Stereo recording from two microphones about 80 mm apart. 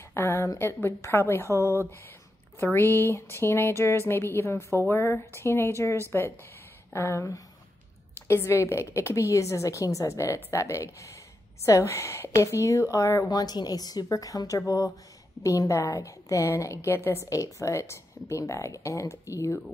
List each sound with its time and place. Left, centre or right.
0.1 s a woman's voice: left
13.3 s a woman's voice: left